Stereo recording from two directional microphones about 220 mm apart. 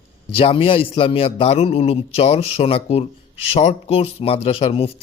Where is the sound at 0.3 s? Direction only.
25° left (ahead or behind).